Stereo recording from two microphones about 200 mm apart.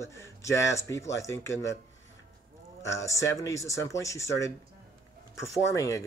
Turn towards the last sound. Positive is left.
turn(degrees=15)  # may be behind; listen again after turning